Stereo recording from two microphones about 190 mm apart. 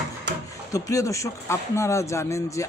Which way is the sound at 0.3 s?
65° right (ahead or behind).